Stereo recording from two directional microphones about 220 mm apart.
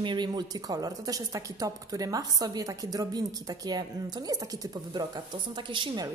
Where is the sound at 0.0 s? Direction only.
20° right (ahead or behind).